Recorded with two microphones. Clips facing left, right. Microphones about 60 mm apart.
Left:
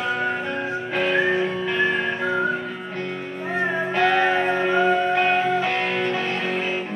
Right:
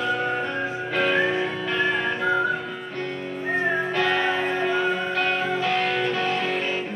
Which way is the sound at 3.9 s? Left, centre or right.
Left.